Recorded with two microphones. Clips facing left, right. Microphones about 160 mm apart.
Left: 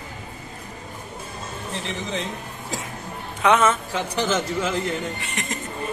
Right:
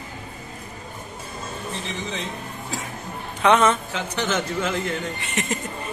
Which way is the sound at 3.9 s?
35° left (ahead or behind).